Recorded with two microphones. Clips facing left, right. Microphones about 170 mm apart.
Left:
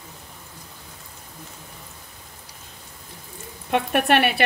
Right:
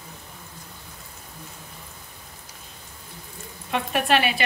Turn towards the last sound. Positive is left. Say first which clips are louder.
# left 3 dB
turn(degrees=60)  # may be behind; listen again after turning